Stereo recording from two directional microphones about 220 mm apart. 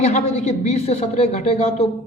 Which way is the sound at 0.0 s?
30° left (ahead or behind).